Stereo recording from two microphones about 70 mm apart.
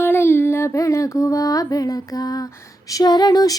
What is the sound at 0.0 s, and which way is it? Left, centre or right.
Music, left.